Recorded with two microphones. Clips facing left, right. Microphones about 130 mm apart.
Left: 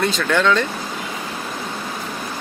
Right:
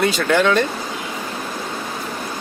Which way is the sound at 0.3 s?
60° right (ahead or behind).